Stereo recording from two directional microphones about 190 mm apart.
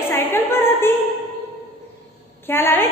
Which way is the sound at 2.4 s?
10° left (ahead or behind).